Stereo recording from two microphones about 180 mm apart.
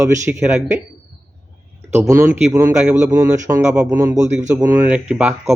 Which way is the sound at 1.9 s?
15° right (ahead or behind).